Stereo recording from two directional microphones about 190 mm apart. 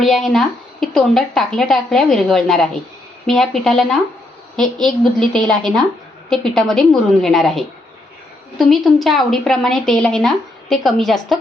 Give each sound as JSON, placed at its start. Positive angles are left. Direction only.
{"t": 0.0, "sound": "a woman's voice", "side_deg": 0}